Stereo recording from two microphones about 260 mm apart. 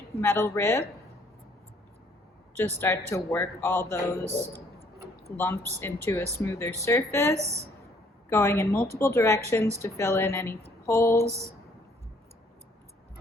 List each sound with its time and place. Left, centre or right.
0.2 s a man's voice: centre
2.6 s a man's voice: centre
5.8 s a man's voice: centre